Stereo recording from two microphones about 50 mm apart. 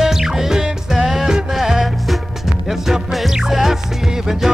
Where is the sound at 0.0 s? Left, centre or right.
Centre.